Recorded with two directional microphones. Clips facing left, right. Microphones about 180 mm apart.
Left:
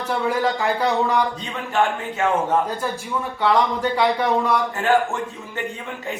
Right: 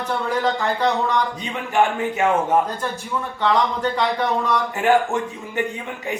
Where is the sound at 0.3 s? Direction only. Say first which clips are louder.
Left 1 dB; 10° left (ahead or behind).